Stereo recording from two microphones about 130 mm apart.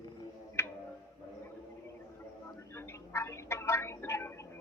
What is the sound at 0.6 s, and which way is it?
Tick-tock, 20° left (ahead or behind).